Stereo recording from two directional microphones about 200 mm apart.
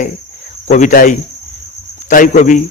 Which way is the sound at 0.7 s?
40° left (ahead or behind).